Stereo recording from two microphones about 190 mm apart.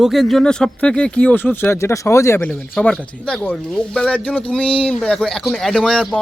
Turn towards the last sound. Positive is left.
turn(degrees=5)  # may be behind; listen again after turning